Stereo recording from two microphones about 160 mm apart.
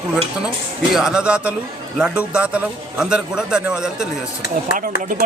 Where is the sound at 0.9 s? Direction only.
5° right (ahead or behind).